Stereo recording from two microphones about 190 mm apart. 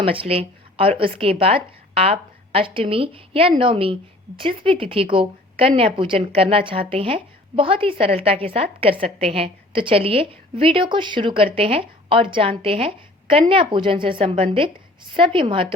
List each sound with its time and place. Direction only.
0.0 s a woman's voice: 30° right (ahead or behind)